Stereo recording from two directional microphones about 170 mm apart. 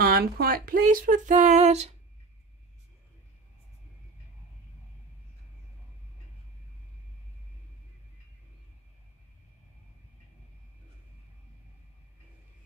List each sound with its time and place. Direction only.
0.0 s speech: 65° right (ahead or behind); by 2.0 s 40° right (ahead or behind)